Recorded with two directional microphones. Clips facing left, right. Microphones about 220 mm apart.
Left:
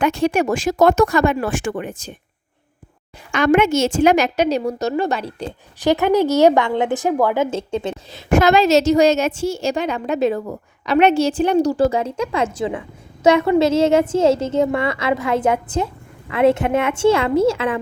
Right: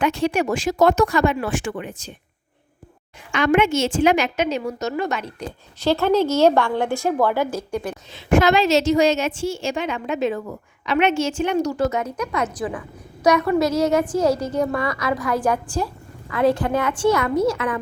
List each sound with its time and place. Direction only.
0.0 s speech: 45° left (ahead or behind)
3.3 s a woman's voice: 40° left (ahead or behind)
5.8 s a woman's voice: 15° left (ahead or behind)
7.5 s a woman's voice: 25° left (ahead or behind)
8.1 s a woman's voice: 45° left (ahead or behind); by 17.7 s 25° left (ahead or behind)